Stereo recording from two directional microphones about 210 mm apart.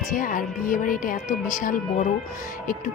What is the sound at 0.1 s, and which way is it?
Speech, 40° left (ahead or behind).